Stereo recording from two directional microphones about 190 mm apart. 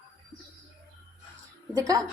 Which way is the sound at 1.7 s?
20° right (ahead or behind).